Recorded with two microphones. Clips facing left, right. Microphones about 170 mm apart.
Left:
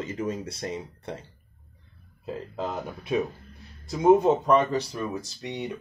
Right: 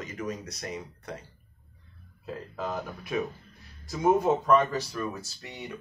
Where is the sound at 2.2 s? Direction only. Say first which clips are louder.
Left 3 dB; 25° left (ahead or behind).